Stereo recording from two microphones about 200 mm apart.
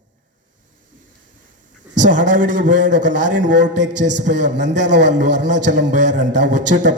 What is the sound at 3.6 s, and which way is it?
Speech, 60° right (ahead or behind).